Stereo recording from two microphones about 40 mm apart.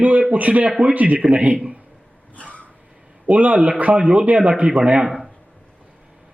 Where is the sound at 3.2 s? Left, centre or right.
Right.